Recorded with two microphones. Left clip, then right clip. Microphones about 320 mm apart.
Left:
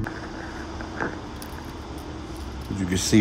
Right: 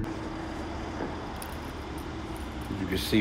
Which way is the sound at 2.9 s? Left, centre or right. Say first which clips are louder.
Left 5 dB; left.